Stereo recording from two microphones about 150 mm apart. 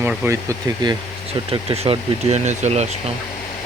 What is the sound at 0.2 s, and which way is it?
Speech, 15° right (ahead or behind).